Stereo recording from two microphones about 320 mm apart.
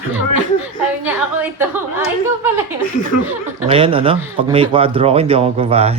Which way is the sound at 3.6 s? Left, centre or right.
Centre.